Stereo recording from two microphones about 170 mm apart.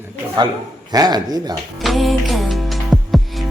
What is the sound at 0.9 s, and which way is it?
Speech, 25° right (ahead or behind).